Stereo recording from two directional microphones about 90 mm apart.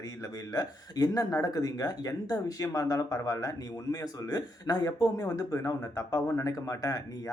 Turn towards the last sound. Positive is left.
turn(degrees=40)  # may be behind; listen again after turning